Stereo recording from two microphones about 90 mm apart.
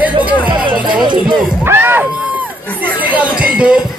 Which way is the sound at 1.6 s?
25° right (ahead or behind).